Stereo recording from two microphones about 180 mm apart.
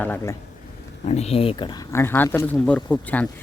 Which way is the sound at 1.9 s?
15° left (ahead or behind).